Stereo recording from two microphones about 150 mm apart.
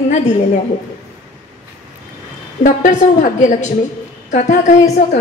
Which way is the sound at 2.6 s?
55° left (ahead or behind).